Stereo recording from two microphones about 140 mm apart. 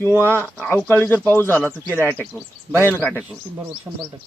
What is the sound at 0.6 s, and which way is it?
Speech, 10° left (ahead or behind).